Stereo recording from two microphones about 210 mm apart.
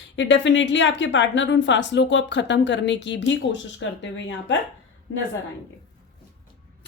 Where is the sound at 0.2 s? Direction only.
60° left (ahead or behind).